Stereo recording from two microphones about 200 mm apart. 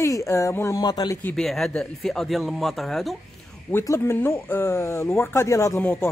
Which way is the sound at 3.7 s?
15° left (ahead or behind).